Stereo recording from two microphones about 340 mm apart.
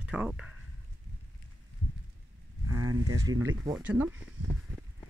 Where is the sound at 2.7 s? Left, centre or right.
Right.